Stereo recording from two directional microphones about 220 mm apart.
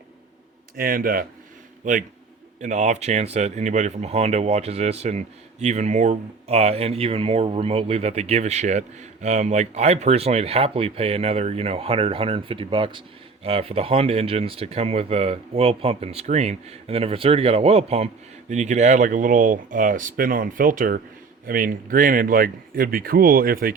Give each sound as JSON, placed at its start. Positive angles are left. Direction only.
{"t": 0.8, "sound": "a man's voice", "side_deg": -40}